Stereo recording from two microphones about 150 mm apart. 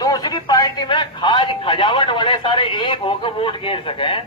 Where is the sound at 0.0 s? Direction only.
25° left (ahead or behind).